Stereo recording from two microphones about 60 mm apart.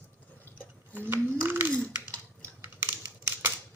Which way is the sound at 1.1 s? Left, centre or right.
Right.